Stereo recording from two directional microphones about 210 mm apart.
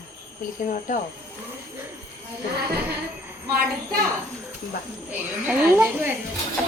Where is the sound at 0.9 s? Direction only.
35° left (ahead or behind).